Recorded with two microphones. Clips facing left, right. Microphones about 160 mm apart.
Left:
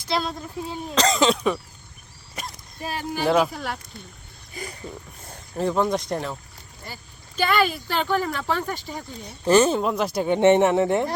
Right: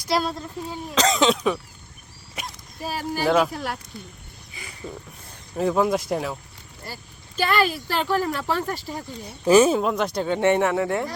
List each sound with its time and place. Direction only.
0.1 s speech: 5° right (ahead or behind)
4.6 s speech: 45° left (ahead or behind)
5.5 s speech: 5° right (ahead or behind)
10.2 s speech: 20° left (ahead or behind)